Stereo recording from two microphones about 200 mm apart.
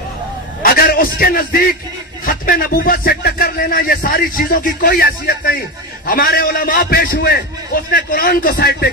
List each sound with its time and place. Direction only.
0.6 s a man's voice: 50° left (ahead or behind)